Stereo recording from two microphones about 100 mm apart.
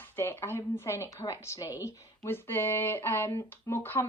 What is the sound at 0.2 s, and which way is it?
Speech, 25° left (ahead or behind).